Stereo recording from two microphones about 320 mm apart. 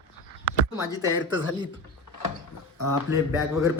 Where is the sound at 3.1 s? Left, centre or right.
Centre.